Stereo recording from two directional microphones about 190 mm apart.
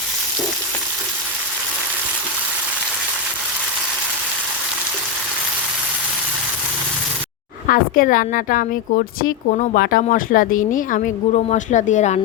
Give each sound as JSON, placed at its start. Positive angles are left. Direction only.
{"t": 7.7, "sound": "a woman's voice", "side_deg": 45}